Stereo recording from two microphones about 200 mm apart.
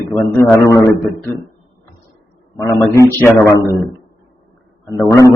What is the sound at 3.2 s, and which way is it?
Speech, 10° left (ahead or behind).